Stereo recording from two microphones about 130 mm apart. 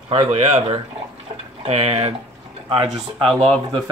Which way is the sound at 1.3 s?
50° right (ahead or behind).